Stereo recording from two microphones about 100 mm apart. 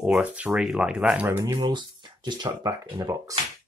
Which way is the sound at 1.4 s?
45° right (ahead or behind).